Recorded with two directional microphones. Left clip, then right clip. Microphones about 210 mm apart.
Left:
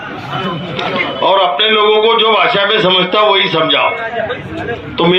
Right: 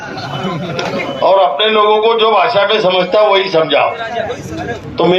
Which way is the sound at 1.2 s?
45° right (ahead or behind).